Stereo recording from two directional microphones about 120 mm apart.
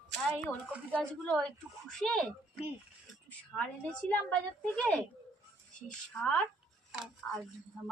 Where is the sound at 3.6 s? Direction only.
10° left (ahead or behind).